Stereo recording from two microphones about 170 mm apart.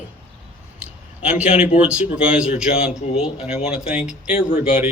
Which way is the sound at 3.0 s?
40° left (ahead or behind).